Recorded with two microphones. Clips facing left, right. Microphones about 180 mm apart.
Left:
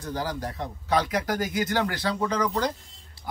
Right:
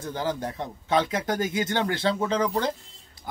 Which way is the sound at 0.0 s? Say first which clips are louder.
Right 2 dB; 25° right (ahead or behind).